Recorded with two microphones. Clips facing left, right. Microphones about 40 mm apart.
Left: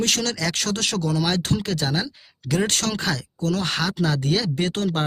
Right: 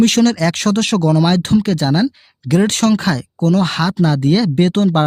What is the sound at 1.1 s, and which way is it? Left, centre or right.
Speech, right.